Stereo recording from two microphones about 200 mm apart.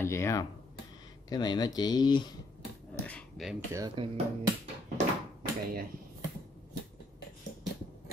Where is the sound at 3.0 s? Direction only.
5° left (ahead or behind).